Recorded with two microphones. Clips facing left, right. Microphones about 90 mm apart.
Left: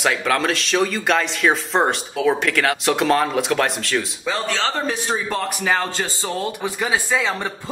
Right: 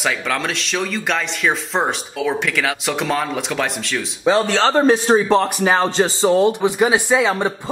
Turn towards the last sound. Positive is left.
turn(degrees=-20)  # may be behind; listen again after turning